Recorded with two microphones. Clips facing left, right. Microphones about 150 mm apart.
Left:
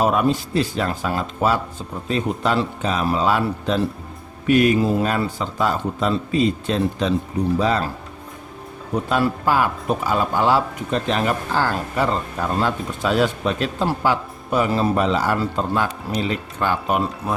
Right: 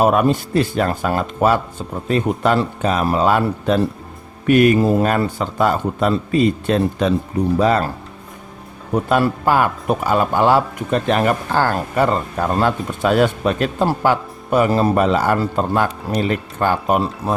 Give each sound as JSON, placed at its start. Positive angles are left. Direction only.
{"t": 0.0, "sound": "a man's voice", "side_deg": -55}
{"t": 9.0, "sound": "speech", "side_deg": -55}
{"t": 17.2, "sound": "speech", "side_deg": -30}